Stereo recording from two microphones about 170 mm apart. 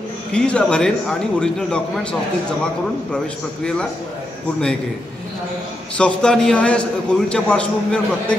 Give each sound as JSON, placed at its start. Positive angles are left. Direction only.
{"t": 0.3, "sound": "a man's voice", "side_deg": 5}
{"t": 5.9, "sound": "a man's voice", "side_deg": 5}